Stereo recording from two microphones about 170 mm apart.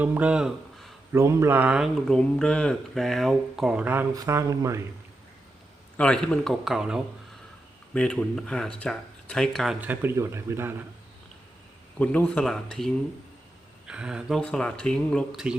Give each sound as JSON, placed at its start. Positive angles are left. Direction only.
{"t": 0.0, "sound": "speech", "side_deg": -10}
{"t": 1.1, "sound": "speech", "side_deg": -15}
{"t": 4.1, "sound": "speech", "side_deg": -20}
{"t": 6.0, "sound": "speech", "side_deg": 5}
{"t": 11.9, "sound": "speech", "side_deg": 10}